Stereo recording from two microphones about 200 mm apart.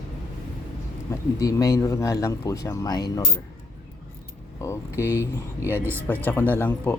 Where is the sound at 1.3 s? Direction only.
15° left (ahead or behind).